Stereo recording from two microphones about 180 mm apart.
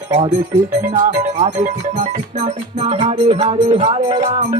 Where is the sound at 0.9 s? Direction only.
45° right (ahead or behind).